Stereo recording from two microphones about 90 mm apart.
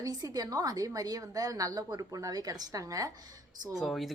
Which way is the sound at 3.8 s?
Centre (ahead or behind).